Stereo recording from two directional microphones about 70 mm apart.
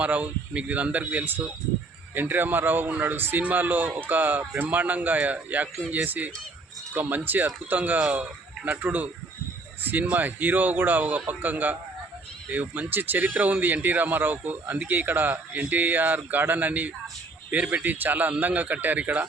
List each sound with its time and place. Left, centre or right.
0.0 s a man's voice: right